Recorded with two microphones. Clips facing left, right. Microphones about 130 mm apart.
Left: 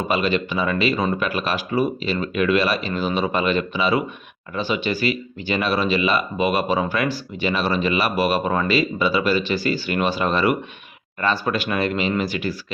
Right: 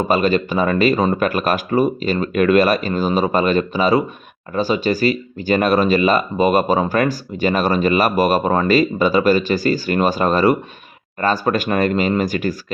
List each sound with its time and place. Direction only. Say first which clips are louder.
0.0 s speech: right 5 dB; 40° right (ahead or behind)